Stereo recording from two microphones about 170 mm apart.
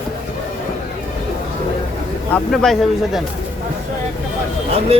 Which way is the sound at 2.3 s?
5° left (ahead or behind).